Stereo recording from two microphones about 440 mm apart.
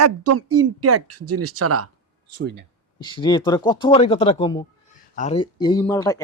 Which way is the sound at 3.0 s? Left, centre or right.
Centre.